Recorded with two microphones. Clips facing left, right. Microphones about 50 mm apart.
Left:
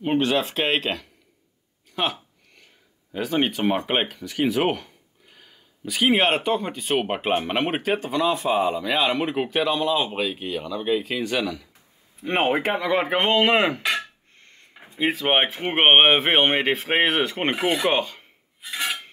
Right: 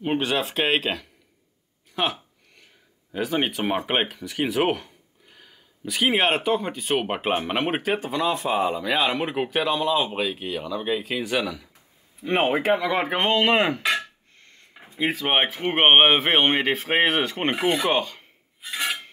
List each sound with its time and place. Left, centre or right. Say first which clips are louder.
0.0 s speech: left 2 dB; centre
12.2 s speech: even; centre
12.9 s speech: left 2 dB; centre
14.7 s a sound: even; centre
15.0 s speech: left 2 dB; centre
16.6 s speech: left 1 dB; centre
16.9 s speech: even; centre
17.5 s speech: right 1 dB; centre
17.9 s speech: left 1 dB; centre
18.6 s a sound: even; centre